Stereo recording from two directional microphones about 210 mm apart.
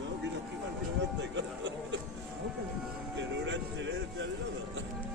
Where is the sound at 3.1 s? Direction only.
60° right (ahead or behind).